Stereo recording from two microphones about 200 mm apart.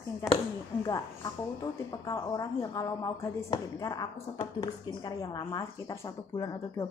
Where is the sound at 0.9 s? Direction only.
15° left (ahead or behind).